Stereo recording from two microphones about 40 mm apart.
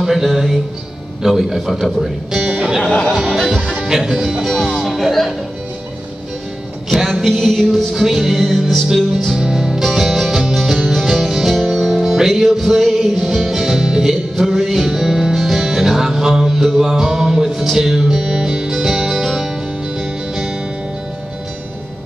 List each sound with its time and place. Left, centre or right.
0.0 s speech: centre
3.4 s music: centre
4.6 s speech: centre
6.9 s music: centre
7.2 s speech: centre
8.8 s music: centre
12.3 s music: centre
14.4 s music: centre